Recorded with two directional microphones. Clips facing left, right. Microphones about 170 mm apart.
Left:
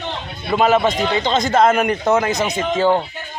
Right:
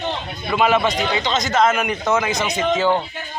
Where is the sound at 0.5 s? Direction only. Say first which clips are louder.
Left 2 dB; 40° left (ahead or behind).